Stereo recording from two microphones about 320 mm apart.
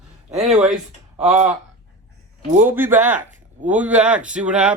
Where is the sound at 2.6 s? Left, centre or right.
Centre.